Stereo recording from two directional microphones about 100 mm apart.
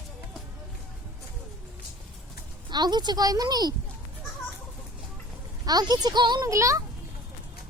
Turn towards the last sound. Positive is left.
turn(degrees=-30)  # may be behind; listen again after turning